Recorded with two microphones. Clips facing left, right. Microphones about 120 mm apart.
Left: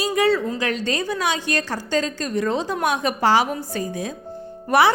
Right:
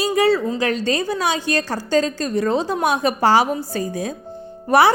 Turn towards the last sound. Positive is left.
turn(degrees=-40)  # may be behind; listen again after turning